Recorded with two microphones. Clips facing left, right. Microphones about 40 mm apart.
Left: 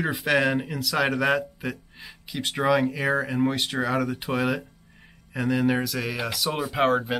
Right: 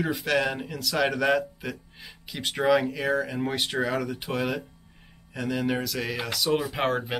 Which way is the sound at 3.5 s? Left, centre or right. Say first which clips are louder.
Left 1 dB; centre.